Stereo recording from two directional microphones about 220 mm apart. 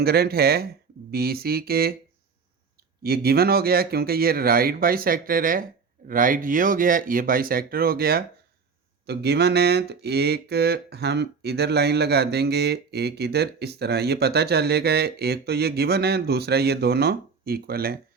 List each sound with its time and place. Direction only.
0.0 s speech: 45° right (ahead or behind)
3.0 s speech: 45° right (ahead or behind)